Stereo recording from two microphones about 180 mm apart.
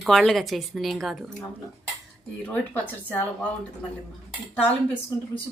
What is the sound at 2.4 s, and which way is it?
Speech, 10° left (ahead or behind).